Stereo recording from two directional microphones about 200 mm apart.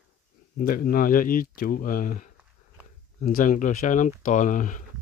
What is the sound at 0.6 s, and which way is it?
Speech, 45° left (ahead or behind).